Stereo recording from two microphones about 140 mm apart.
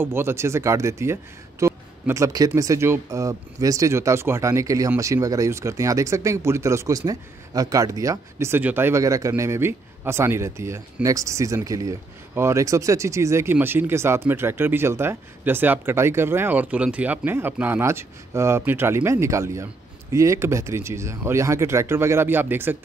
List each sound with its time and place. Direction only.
0.0 s speech: 15° right (ahead or behind)